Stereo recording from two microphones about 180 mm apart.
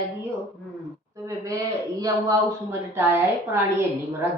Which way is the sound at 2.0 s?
20° right (ahead or behind).